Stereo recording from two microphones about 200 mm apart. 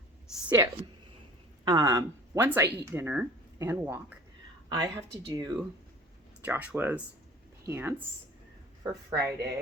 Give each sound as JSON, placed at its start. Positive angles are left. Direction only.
{"t": 0.4, "sound": "a woman's voice", "side_deg": -15}
{"t": 5.3, "sound": "speech", "side_deg": -20}
{"t": 6.4, "sound": "speech", "side_deg": -10}